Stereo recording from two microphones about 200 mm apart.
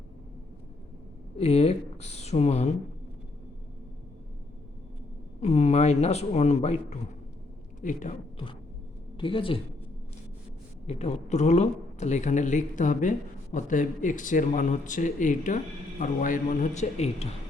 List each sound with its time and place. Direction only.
1.4 s a woman's voice: 30° left (ahead or behind)
5.4 s a woman's voice: 35° left (ahead or behind)
9.1 s speech: 25° left (ahead or behind)
10.8 s speech: 35° left (ahead or behind)